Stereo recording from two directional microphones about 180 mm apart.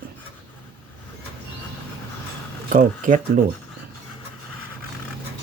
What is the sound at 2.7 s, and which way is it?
Speech, 45° right (ahead or behind).